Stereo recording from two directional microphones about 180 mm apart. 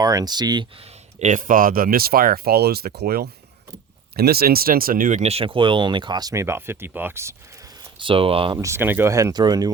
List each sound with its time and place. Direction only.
0.0 s speech: 20° right (ahead or behind)
1.2 s speech: 45° right (ahead or behind); by 7.3 s 15° right (ahead or behind)
7.9 s speech: 30° right (ahead or behind)
8.5 s speech: 15° right (ahead or behind)